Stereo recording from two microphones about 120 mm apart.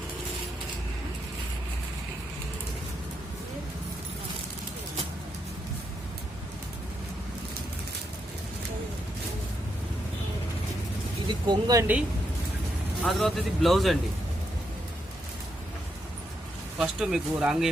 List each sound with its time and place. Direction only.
11.3 s speech: 35° right (ahead or behind)
11.8 s speech: 15° right (ahead or behind)
13.0 s speech: centre (ahead or behind)
16.7 s speech: 5° right (ahead or behind)